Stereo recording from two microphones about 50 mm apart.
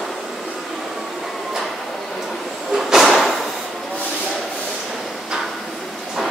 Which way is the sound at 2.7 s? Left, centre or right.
Centre.